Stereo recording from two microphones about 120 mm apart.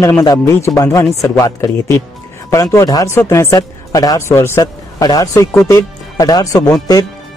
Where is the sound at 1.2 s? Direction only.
25° left (ahead or behind).